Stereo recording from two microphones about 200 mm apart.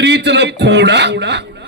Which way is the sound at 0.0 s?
60° right (ahead or behind).